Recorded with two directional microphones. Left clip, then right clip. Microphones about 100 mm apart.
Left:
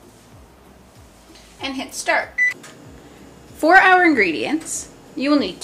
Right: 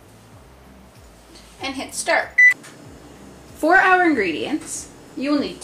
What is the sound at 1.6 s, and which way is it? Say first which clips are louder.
Speech: left 1 dB; 5° left (ahead or behind).